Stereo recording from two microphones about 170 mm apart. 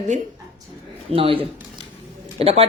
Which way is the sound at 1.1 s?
35° right (ahead or behind).